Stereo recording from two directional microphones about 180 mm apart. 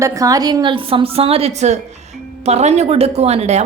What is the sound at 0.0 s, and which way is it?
A woman's voice, 20° right (ahead or behind).